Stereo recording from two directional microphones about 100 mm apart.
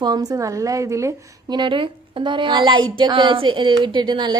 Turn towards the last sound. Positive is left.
turn(degrees=-50)  # may be behind; listen again after turning